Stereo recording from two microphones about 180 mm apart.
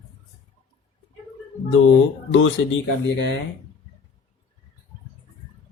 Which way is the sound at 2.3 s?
90° left.